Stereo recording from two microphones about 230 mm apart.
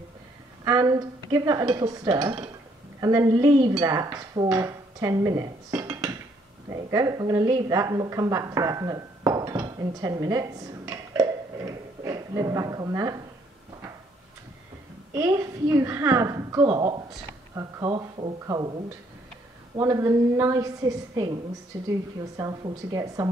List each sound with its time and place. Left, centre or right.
0.7 s speech: centre
3.0 s dishes: centre
6.7 s a woman's voice: centre
15.1 s speech: centre
22.4 s speech: centre